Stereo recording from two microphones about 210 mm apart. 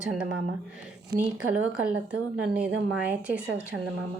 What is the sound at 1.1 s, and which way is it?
Speech, 50° right (ahead or behind).